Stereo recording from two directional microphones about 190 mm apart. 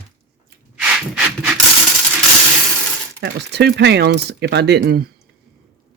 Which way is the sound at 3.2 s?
65° right (ahead or behind).